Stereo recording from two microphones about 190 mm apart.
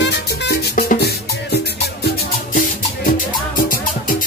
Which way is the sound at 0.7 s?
50° left (ahead or behind).